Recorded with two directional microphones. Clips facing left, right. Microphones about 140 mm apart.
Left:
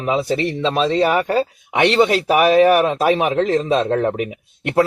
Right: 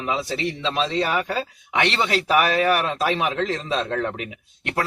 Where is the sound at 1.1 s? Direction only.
40° left (ahead or behind).